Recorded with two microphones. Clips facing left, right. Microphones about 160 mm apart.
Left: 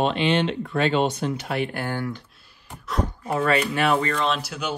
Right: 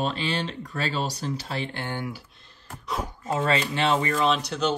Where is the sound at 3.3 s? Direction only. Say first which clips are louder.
Left 3 dB; 25° right (ahead or behind).